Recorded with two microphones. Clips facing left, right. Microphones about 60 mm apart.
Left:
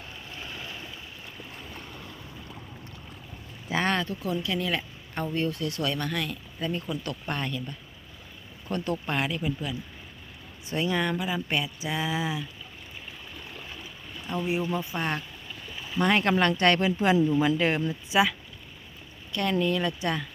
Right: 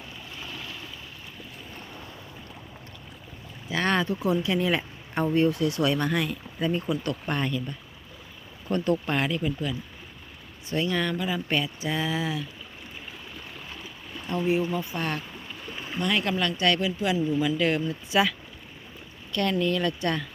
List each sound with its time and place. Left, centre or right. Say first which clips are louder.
0.5 s vehicle: even; left
3.7 s speech: left 1 dB; left
4.0 s speech: right 5 dB; centre
10.7 s speech: even; centre
14.7 s speech: even; left
16.0 s speech: left 3 dB; left; by 20.2 s centre